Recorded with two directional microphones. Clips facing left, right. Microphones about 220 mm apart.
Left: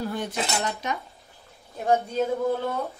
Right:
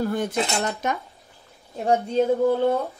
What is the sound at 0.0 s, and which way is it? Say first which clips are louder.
Speech: right 5 dB; 45° right (ahead or behind).